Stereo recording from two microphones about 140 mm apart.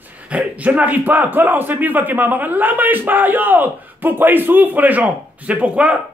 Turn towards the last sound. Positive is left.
turn(degrees=-10)  # may be behind; listen again after turning